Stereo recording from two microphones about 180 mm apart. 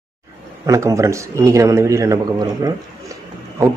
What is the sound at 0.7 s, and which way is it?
Speech, 15° right (ahead or behind).